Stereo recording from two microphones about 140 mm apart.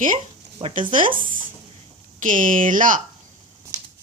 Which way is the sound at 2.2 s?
70° right (ahead or behind).